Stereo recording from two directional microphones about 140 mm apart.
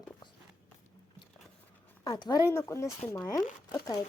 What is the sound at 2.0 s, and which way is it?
Speech, 30° left (ahead or behind).